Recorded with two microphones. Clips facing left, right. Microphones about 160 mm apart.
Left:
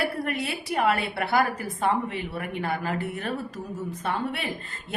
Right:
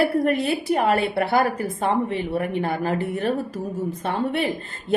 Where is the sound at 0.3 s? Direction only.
30° right (ahead or behind).